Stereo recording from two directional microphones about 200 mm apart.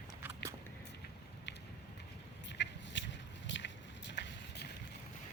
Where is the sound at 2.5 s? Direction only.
65° left (ahead or behind).